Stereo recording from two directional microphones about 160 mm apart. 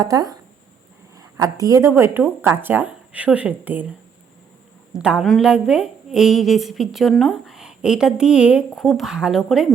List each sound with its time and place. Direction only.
0.0 s speech: 20° right (ahead or behind)
4.9 s a woman's voice: 5° right (ahead or behind)